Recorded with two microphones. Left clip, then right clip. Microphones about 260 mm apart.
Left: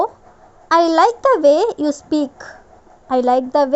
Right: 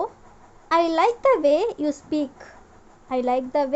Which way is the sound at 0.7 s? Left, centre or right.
Left.